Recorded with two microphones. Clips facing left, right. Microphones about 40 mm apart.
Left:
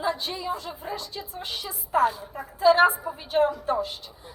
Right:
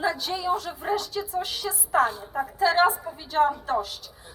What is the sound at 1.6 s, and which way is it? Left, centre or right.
Speech, right.